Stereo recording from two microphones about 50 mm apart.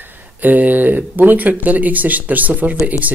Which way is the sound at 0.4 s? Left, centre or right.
Right.